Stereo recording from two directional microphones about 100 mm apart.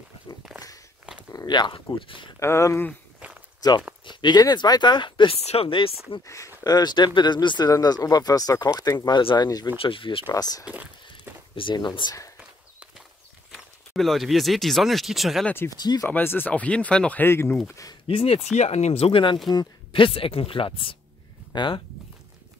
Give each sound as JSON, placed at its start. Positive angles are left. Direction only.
{"t": 1.3, "sound": "speech", "side_deg": 45}
{"t": 2.4, "sound": "speech", "side_deg": 30}
{"t": 3.6, "sound": "speech", "side_deg": 40}
{"t": 6.2, "sound": "speech", "side_deg": 30}
{"t": 6.6, "sound": "speech", "side_deg": 45}
{"t": 9.8, "sound": "speech", "side_deg": 60}
{"t": 10.3, "sound": "speech", "side_deg": 40}
{"t": 10.6, "sound": "speech", "side_deg": -15}
{"t": 11.5, "sound": "speech", "side_deg": 55}
{"t": 13.5, "sound": "speech", "side_deg": 0}
{"t": 15.7, "sound": "speech", "side_deg": 40}
{"t": 16.1, "sound": "speech", "side_deg": 20}
{"t": 17.2, "sound": "speech", "side_deg": 20}
{"t": 18.0, "sound": "speech", "side_deg": 70}